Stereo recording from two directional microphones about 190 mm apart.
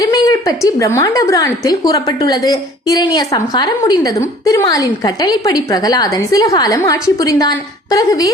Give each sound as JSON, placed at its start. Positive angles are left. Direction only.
{"t": 0.0, "sound": "a woman's voice", "side_deg": 20}